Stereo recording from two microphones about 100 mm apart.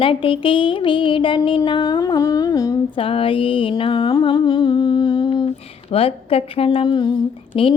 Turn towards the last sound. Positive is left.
turn(degrees=60)  # may be behind; listen again after turning